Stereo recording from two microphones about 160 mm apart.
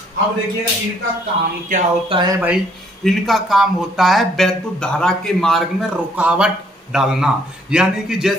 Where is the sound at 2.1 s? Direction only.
25° right (ahead or behind).